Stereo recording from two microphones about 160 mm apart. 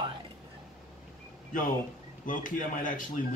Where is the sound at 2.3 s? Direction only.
55° left (ahead or behind).